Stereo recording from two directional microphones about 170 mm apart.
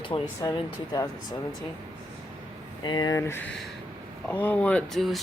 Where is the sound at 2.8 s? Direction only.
25° left (ahead or behind).